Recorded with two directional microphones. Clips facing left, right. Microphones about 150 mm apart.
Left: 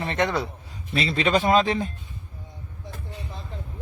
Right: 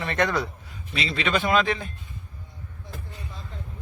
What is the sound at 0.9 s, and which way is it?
Speech, 35° left (ahead or behind).